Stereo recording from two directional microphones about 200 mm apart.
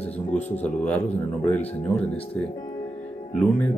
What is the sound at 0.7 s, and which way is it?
Speech, 5° left (ahead or behind).